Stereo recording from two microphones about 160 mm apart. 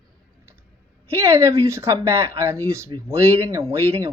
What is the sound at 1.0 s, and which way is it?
A woman's voice, 15° right (ahead or behind).